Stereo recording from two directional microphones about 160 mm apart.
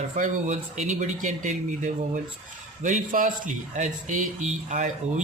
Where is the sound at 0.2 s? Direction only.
50° right (ahead or behind).